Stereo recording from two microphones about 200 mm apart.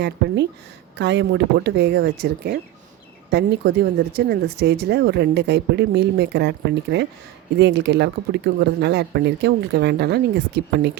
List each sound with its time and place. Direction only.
0.9 s speech: 60° right (ahead or behind)